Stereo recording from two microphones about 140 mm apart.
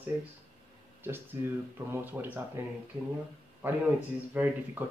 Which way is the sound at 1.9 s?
15° right (ahead or behind).